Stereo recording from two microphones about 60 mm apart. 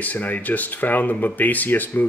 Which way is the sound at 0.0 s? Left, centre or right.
Left.